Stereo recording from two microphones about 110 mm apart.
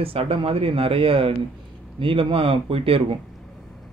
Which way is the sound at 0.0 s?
55° right (ahead or behind).